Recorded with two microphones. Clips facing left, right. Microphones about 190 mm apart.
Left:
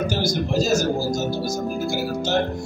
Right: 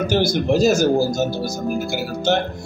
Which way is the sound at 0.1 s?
60° right (ahead or behind).